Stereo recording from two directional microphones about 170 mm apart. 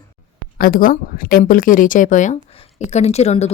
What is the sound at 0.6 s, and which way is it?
A woman's voice, 55° left (ahead or behind).